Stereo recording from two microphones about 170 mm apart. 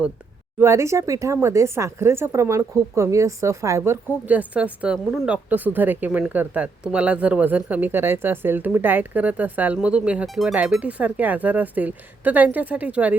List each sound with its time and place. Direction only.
0.6 s speech: 15° right (ahead or behind)